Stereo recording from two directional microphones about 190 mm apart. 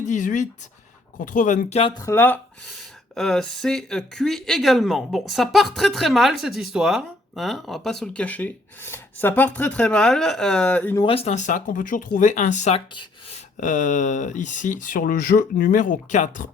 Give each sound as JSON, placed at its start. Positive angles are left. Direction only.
{"t": 0.0, "sound": "speech", "side_deg": 40}
{"t": 2.0, "sound": "speech", "side_deg": 15}
{"t": 10.9, "sound": "speech", "side_deg": 30}
{"t": 13.6, "sound": "speech", "side_deg": 40}